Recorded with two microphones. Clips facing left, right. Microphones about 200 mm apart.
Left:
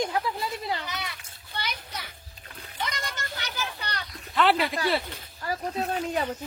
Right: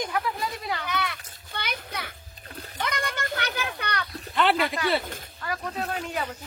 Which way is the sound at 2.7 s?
55° right (ahead or behind).